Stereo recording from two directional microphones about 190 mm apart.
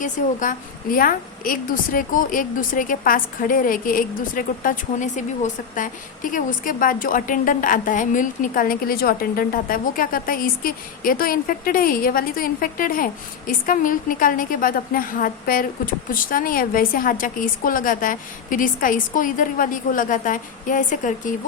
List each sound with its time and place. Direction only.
0.0 s a woman's voice: 45° left (ahead or behind)